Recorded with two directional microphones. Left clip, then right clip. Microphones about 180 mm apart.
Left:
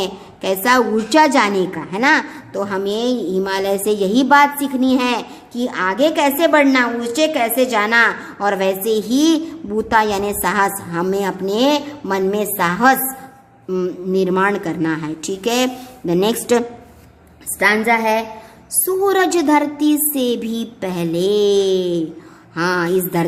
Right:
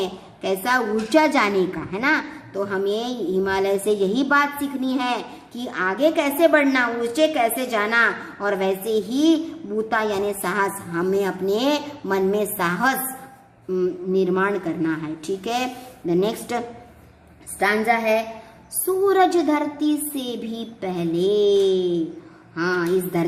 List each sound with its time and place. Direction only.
0.0 s a woman's voice: 30° left (ahead or behind)
17.6 s a woman's voice: 25° left (ahead or behind)